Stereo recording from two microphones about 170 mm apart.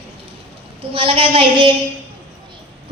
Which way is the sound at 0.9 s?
35° right (ahead or behind).